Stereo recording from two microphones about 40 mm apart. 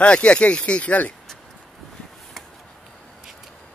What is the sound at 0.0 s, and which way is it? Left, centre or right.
Speech, left.